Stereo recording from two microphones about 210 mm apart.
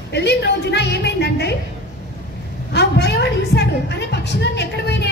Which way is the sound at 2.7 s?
50° left (ahead or behind).